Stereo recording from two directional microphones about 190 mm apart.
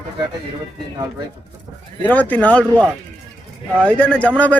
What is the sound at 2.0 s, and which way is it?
A man's voice, 10° left (ahead or behind).